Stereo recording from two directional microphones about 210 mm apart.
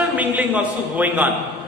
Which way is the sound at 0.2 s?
5° right (ahead or behind).